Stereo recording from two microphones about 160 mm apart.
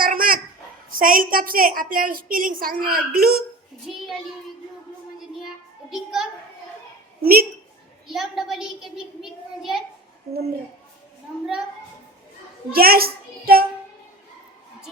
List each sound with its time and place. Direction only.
0.0 s a sound: 60° right (ahead or behind)
0.9 s a woman's voice: 60° right (ahead or behind)
3.9 s a child's voice: centre (ahead or behind)
5.9 s a child's voice: 5° right (ahead or behind)
7.2 s a child's voice: 70° right (ahead or behind)
8.0 s a child's voice: centre (ahead or behind)
12.7 s a child's voice: 70° right (ahead or behind)